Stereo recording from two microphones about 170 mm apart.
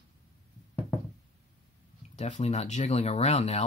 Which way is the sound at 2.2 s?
40° left (ahead or behind).